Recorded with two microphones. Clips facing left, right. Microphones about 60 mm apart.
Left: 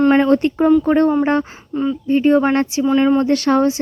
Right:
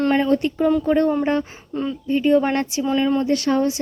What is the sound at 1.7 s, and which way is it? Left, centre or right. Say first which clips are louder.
Speech: left 5 dB; centre.